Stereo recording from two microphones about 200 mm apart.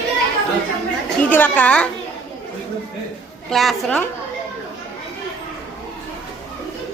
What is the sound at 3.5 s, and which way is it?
Speech, centre (ahead or behind).